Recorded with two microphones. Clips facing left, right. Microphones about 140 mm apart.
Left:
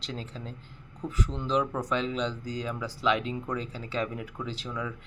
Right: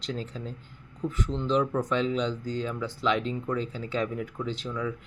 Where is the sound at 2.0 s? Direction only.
Centre (ahead or behind).